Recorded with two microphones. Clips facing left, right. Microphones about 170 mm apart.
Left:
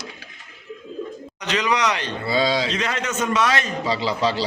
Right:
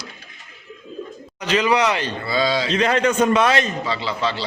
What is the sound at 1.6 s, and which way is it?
Speech, 35° right (ahead or behind).